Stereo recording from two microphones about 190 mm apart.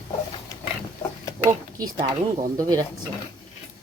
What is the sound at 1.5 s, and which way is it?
Speech, 20° right (ahead or behind).